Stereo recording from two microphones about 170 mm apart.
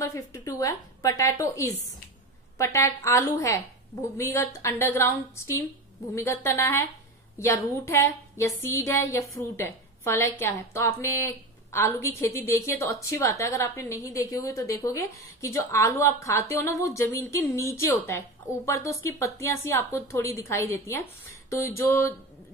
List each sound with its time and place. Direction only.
0.0 s a woman's voice: 20° left (ahead or behind)
6.1 s a woman's voice: 15° left (ahead or behind)